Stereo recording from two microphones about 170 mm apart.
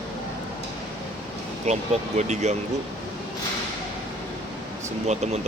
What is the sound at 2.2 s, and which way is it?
Speech, 40° right (ahead or behind).